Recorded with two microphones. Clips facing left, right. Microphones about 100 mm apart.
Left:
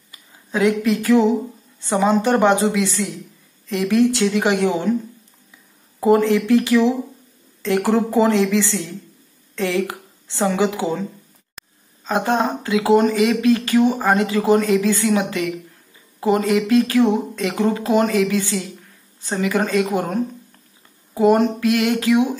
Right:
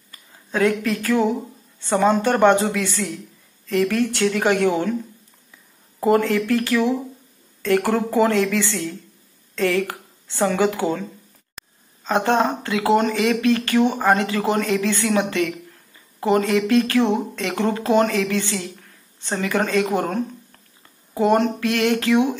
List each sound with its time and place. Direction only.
0.1 s a woman's voice: 15° left (ahead or behind)
5.9 s a woman's voice: 15° left (ahead or behind)
11.5 s a sound: 10° left (ahead or behind)
12.6 s a woman's voice: 20° left (ahead or behind)
21.2 s a woman's voice: 15° left (ahead or behind)